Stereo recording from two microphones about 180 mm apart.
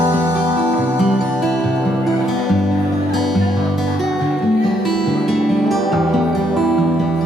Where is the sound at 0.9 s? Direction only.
Centre (ahead or behind).